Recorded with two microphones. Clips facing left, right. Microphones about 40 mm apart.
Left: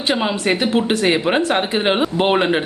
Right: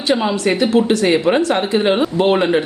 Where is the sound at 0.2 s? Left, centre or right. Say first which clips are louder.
Right 2 dB; centre.